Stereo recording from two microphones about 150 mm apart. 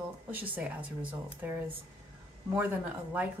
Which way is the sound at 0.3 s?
10° right (ahead or behind).